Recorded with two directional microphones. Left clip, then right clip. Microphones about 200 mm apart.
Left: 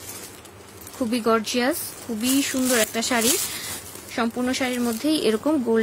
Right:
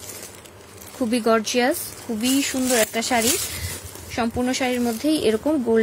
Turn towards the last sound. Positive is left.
turn(degrees=0)  # may be behind; listen again after turning